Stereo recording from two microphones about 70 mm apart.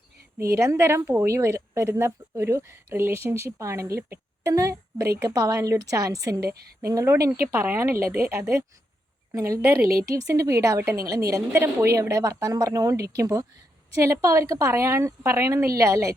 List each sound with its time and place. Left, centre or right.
0.5 s a woman's voice: right
6.8 s speech: right
7.5 s speech: right
10.2 s speech: right
13.9 s speech: right